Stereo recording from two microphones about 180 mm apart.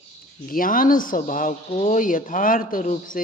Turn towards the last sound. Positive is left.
turn(degrees=45)  # may be behind; listen again after turning